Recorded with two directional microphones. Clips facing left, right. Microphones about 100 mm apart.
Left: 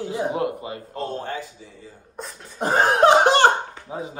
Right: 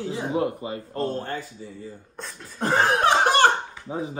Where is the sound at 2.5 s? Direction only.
20° left (ahead or behind).